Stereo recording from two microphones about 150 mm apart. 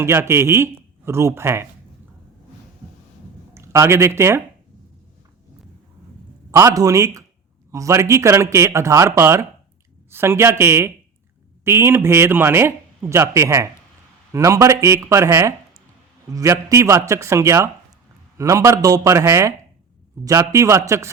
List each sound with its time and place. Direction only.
0.0 s speech: 15° right (ahead or behind)
3.5 s speech: 15° right (ahead or behind)
6.5 s speech: 20° right (ahead or behind)